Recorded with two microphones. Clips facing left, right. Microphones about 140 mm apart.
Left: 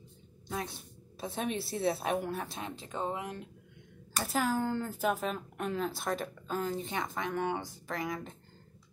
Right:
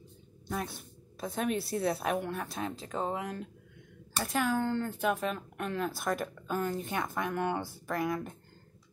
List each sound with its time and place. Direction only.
1.2 s speech: centre (ahead or behind)
2.8 s speech: 35° right (ahead or behind)
3.2 s speech: 20° left (ahead or behind)
4.2 s speech: centre (ahead or behind)